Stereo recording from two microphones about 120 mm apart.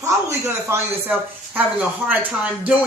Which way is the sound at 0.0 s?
20° right (ahead or behind).